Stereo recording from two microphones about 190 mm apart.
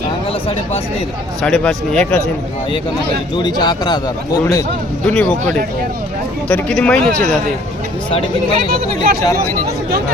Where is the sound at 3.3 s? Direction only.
20° left (ahead or behind).